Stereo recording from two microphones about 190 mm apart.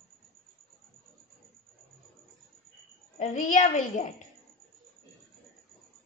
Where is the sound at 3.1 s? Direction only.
40° left (ahead or behind).